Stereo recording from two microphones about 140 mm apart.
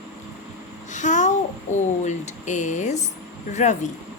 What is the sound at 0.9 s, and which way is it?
Babbling, 60° left (ahead or behind).